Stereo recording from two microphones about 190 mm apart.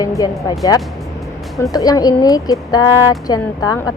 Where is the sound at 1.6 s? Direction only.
20° left (ahead or behind).